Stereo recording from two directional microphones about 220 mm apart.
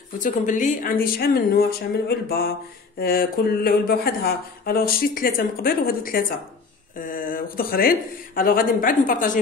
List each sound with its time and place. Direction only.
0.2 s speech: 35° left (ahead or behind)